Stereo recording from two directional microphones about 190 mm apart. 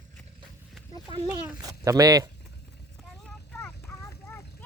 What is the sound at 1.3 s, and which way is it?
A child's voice, 15° right (ahead or behind).